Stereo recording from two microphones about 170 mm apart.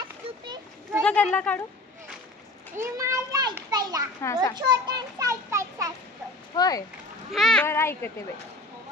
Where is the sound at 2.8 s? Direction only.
20° right (ahead or behind).